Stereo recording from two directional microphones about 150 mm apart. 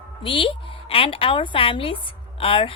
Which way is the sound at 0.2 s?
35° left (ahead or behind).